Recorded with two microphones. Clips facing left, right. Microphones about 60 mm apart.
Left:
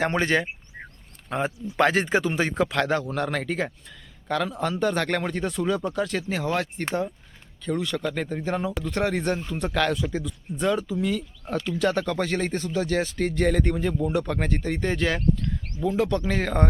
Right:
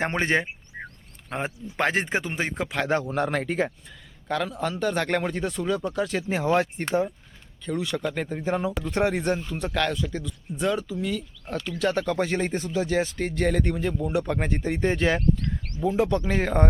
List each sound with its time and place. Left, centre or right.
0.0 s speech: right
4.3 s speech: centre
6.2 s speech: right
7.6 s speech: centre